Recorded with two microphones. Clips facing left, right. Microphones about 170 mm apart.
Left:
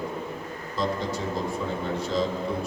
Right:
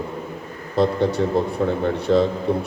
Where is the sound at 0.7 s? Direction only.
65° right (ahead or behind).